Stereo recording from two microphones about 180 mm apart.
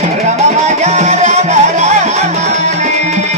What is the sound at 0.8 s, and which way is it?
Music, 40° right (ahead or behind).